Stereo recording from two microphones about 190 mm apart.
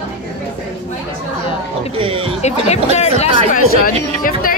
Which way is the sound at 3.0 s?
35° left (ahead or behind).